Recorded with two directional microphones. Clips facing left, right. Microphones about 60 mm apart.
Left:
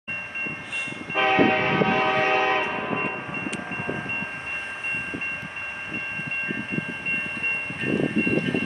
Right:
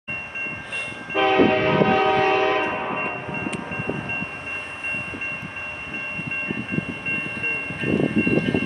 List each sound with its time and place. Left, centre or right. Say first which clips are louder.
1.1 s train: right 2 dB; left